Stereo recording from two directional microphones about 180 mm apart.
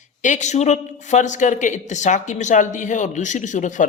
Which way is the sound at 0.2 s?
40° left (ahead or behind).